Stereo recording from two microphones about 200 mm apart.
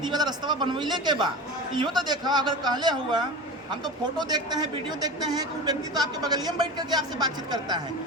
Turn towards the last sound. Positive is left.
turn(degrees=-20)  # may be behind; listen again after turning